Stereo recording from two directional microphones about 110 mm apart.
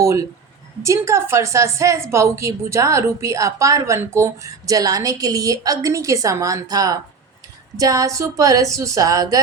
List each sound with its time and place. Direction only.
0.0 s a woman's voice: 30° right (ahead or behind)